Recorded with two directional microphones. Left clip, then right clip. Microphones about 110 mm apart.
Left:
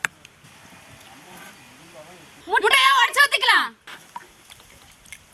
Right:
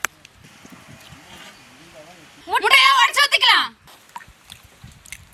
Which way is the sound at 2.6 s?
Centre (ahead or behind).